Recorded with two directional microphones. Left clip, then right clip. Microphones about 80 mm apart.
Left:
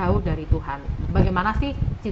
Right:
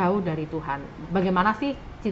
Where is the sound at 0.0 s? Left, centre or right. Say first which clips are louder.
Right 1 dB; centre.